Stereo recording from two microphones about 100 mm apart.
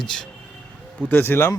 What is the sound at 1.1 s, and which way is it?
Speech, 20° left (ahead or behind).